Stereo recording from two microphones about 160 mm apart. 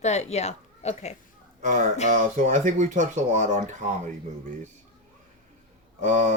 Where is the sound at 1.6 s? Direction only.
50° right (ahead or behind).